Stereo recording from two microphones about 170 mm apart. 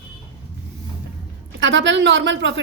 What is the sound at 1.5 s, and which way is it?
Speech, 90° right.